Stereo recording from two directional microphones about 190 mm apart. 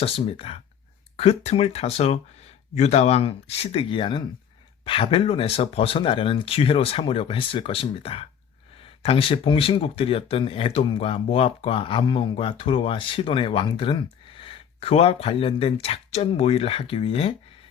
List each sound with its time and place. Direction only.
0.0 s speech: 30° left (ahead or behind)